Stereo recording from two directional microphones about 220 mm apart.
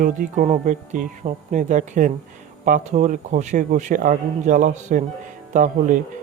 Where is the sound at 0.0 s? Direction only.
35° right (ahead or behind).